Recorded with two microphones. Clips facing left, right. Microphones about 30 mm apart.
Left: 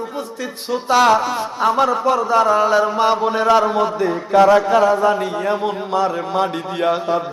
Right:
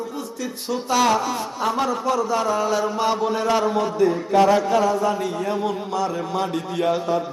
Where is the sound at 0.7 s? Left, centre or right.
Left.